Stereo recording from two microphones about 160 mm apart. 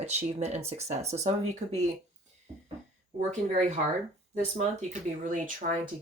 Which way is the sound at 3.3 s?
45° right (ahead or behind).